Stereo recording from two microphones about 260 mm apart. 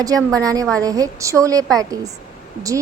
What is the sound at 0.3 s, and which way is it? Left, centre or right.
A woman's voice, centre.